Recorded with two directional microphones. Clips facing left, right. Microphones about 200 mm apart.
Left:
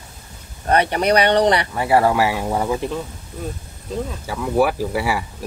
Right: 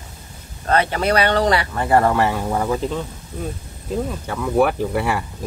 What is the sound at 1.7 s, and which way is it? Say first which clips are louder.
Speech: even; 5° left (ahead or behind).